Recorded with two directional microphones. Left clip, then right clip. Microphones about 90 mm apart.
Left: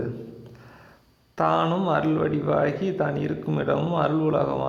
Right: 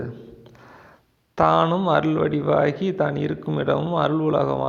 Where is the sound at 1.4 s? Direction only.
60° right (ahead or behind).